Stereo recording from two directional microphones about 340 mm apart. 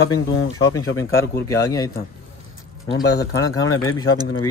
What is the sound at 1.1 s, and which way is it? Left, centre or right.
Speech, left.